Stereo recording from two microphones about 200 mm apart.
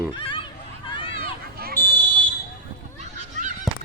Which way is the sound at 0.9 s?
25° left (ahead or behind).